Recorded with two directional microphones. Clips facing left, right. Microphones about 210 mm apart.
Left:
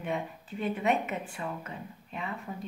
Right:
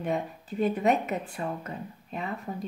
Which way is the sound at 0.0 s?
40° right (ahead or behind).